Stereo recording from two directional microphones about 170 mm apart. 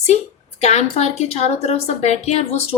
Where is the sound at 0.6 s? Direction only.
40° left (ahead or behind).